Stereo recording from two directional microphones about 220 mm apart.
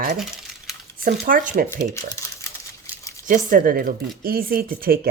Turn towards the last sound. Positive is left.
turn(degrees=-40)  # may be behind; listen again after turning